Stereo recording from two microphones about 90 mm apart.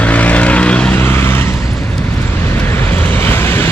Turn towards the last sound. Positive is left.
turn(degrees=25)  # may be behind; listen again after turning